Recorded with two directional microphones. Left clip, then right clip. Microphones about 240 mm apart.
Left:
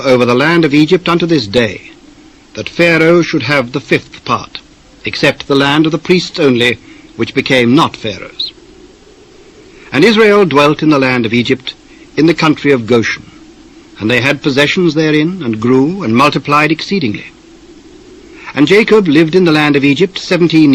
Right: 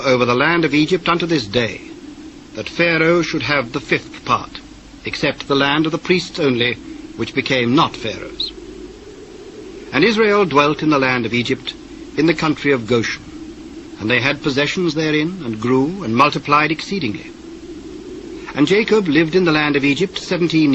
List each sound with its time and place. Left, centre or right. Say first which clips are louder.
0.0 s a man's voice: left 5 dB; left
9.9 s a man's voice: left 7 dB; left
18.4 s a man's voice: left 7 dB; left